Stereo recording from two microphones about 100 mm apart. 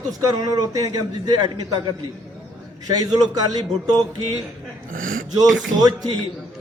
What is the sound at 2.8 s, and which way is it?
Speech, 40° right (ahead or behind).